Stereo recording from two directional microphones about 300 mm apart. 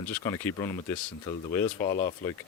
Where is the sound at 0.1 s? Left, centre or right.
Centre.